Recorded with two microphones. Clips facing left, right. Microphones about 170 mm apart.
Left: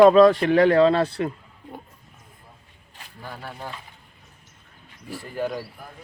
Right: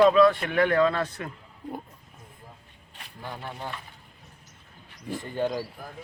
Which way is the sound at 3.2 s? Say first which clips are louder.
Even; 20° right (ahead or behind).